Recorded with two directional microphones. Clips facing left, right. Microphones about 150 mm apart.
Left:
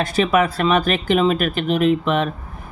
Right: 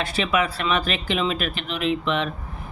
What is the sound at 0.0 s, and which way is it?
Speech, 45° left (ahead or behind).